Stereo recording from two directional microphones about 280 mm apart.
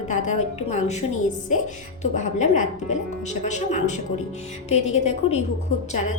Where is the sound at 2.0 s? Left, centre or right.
Left.